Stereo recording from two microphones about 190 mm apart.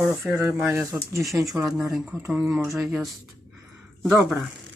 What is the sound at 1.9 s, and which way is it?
Speech, centre (ahead or behind).